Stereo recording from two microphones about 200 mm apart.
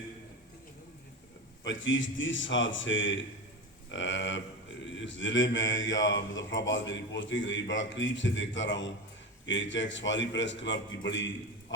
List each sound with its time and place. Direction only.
1.6 s mantra: 70° left (ahead or behind)
3.9 s a man's voice: 65° left (ahead or behind)
4.9 s mantra: 70° left (ahead or behind)
9.5 s a man's voice: 65° left (ahead or behind)